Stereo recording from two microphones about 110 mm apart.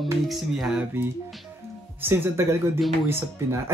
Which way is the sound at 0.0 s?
Centre (ahead or behind).